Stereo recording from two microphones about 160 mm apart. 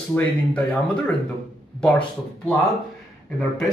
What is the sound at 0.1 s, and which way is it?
A man's voice, 10° left (ahead or behind).